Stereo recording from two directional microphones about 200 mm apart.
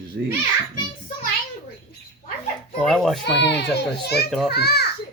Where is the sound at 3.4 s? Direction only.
60° left (ahead or behind).